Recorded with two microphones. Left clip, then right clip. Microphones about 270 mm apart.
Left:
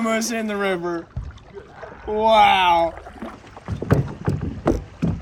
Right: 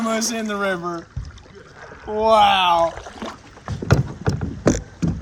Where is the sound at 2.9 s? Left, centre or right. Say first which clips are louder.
Right 3 dB; right.